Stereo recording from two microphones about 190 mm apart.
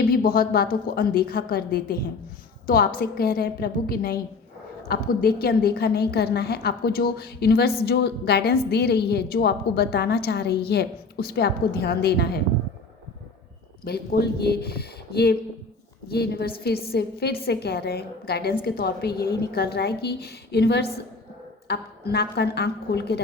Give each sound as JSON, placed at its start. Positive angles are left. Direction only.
{"t": 0.1, "sound": "a woman's voice", "side_deg": 50}
{"t": 13.8, "sound": "a woman's voice", "side_deg": 55}